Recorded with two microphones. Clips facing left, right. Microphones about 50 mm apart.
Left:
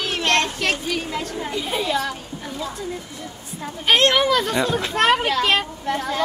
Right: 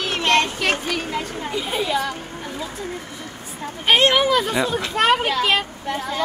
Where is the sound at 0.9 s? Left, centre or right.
Centre.